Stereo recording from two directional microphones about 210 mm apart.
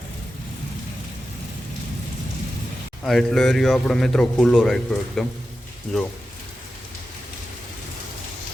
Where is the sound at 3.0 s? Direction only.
Centre (ahead or behind).